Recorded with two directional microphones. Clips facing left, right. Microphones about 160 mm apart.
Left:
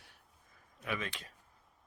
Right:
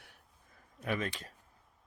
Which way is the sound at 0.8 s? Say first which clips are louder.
Right 4 dB; 40° right (ahead or behind).